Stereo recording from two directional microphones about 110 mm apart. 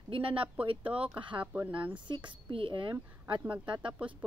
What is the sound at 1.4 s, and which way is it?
Speech, 15° right (ahead or behind).